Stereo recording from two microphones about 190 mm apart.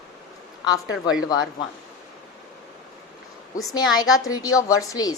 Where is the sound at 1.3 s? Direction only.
20° left (ahead or behind).